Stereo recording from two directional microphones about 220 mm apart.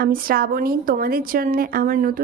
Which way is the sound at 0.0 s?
40° right (ahead or behind).